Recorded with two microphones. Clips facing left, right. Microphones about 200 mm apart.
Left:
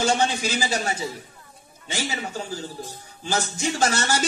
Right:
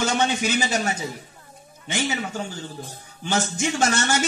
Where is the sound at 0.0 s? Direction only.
30° left (ahead or behind).